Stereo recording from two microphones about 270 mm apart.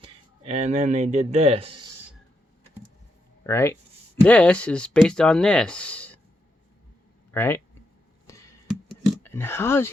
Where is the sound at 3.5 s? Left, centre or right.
Centre.